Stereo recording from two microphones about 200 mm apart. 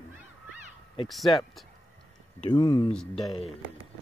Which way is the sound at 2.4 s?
20° left (ahead or behind).